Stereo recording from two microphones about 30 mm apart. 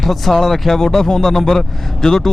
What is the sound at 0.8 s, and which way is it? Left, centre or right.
A man's voice, centre.